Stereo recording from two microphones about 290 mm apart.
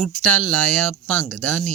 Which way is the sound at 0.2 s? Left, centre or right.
Right.